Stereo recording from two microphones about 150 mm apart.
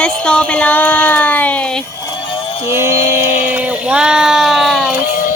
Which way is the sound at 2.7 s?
15° right (ahead or behind).